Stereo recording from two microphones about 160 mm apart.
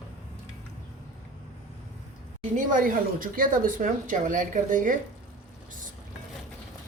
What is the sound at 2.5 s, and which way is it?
Speech, 60° right (ahead or behind).